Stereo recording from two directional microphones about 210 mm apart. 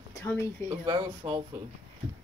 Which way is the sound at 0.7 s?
20° right (ahead or behind).